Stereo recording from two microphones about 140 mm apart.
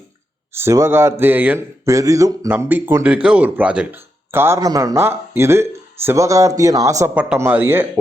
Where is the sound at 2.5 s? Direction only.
15° right (ahead or behind).